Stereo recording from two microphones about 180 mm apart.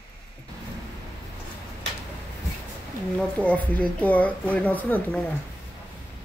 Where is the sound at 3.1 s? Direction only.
5° left (ahead or behind).